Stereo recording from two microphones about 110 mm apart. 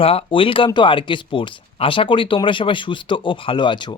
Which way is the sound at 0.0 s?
60° left (ahead or behind).